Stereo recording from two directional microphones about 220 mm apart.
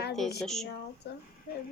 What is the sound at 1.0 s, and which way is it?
Speech, 50° left (ahead or behind).